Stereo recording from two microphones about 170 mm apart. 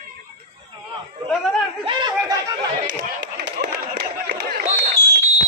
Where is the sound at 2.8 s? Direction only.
50° right (ahead or behind); by 4.5 s 70° right (ahead or behind).